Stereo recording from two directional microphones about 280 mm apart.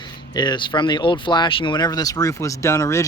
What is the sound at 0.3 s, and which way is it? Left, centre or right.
Speech, centre.